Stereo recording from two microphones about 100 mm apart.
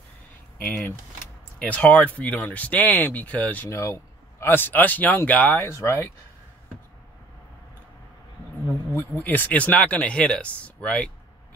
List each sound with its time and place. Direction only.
0.7 s speech: 20° left (ahead or behind)
3.7 s a sound: 30° left (ahead or behind)
4.5 s speech: 20° left (ahead or behind)
5.7 s speech: 25° left (ahead or behind)
9.2 s speech: 15° left (ahead or behind)